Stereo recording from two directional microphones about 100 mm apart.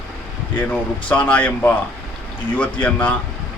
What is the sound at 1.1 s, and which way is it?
A man's voice, 15° left (ahead or behind).